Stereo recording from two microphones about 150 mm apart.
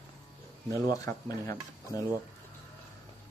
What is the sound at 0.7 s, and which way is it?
Speech, 25° left (ahead or behind).